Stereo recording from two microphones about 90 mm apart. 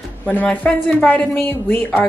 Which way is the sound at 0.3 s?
15° left (ahead or behind).